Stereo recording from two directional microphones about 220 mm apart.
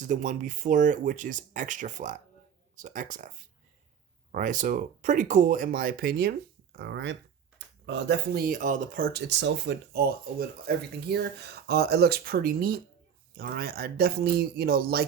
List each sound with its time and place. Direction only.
0.0 s speech: 35° right (ahead or behind)
4.3 s speech: 35° right (ahead or behind)